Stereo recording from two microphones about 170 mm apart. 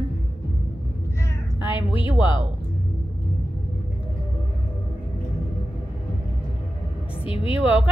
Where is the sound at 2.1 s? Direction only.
30° left (ahead or behind).